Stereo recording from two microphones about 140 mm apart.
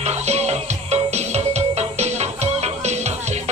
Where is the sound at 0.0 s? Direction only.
50° right (ahead or behind).